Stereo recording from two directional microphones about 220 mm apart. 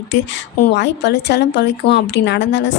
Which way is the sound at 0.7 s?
50° left (ahead or behind).